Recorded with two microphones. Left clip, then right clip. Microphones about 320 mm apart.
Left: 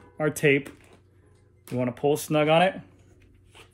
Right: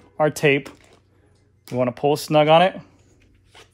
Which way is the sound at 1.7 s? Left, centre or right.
Right.